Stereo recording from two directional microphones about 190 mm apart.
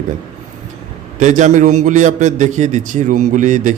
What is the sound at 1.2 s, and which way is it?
A man's voice, 40° right (ahead or behind).